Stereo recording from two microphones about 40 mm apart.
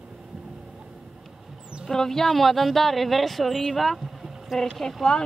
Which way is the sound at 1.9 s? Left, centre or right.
Centre.